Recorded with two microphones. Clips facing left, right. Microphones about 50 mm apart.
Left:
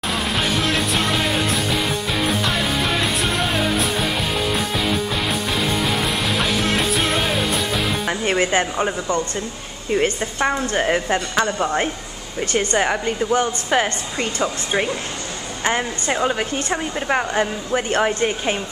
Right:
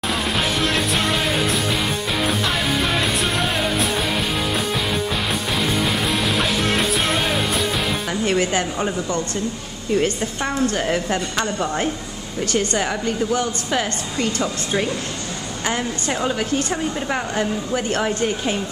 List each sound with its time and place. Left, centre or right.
0.1 s music: centre
5.5 s music: centre
8.1 s a woman's voice: left